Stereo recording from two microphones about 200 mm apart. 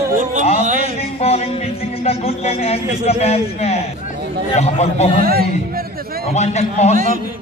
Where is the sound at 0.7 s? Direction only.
40° right (ahead or behind).